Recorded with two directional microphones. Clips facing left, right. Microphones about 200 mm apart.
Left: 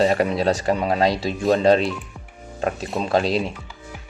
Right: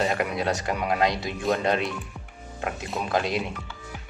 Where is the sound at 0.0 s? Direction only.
30° left (ahead or behind).